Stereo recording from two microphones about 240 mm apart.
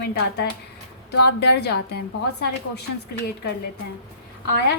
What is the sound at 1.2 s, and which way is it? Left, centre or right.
Speech, left.